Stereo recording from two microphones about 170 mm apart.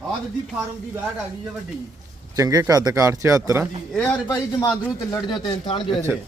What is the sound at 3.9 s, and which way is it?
A man's voice, 10° left (ahead or behind).